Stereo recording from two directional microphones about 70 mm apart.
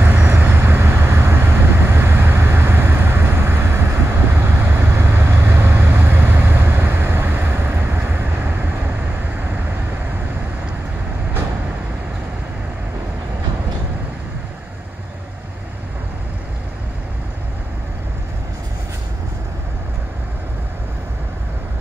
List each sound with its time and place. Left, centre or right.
0.0 s vehicle: right